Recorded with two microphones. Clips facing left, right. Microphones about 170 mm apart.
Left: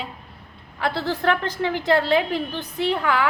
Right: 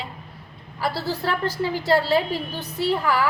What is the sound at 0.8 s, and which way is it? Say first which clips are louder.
A woman's voice: left 2 dB; 5° right (ahead or behind).